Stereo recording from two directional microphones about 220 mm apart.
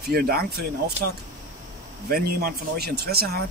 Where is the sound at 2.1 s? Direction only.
45° right (ahead or behind).